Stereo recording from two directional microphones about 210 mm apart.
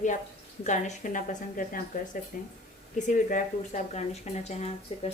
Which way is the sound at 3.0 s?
35° left (ahead or behind).